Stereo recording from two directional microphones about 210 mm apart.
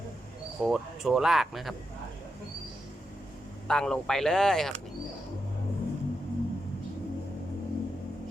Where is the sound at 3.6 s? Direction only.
5° left (ahead or behind).